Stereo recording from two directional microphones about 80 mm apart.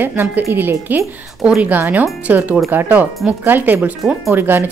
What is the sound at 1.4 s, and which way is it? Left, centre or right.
Speech, centre.